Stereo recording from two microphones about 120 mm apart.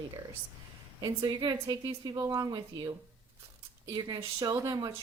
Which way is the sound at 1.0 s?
35° right (ahead or behind).